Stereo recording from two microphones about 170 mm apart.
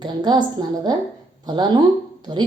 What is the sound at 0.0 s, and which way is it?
Speech, 25° right (ahead or behind).